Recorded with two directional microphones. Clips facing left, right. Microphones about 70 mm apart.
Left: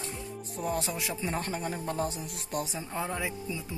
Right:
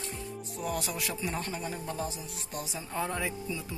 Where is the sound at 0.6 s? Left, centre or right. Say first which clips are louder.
Left 2 dB; left.